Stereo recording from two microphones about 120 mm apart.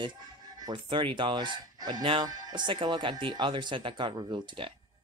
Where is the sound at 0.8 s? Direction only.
45° right (ahead or behind).